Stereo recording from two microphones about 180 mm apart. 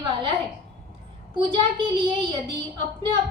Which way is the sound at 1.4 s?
25° right (ahead or behind).